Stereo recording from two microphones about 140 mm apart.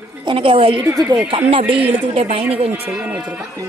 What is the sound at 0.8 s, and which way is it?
Speech, 25° right (ahead or behind).